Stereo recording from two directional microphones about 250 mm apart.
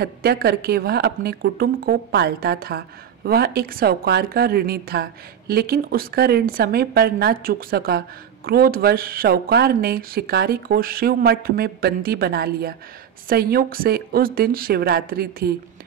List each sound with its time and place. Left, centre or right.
0.0 s speech: right